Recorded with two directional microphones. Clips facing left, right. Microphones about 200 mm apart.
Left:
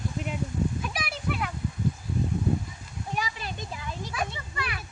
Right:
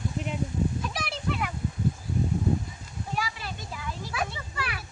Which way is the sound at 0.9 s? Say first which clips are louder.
Right 1 dB; 10° left (ahead or behind).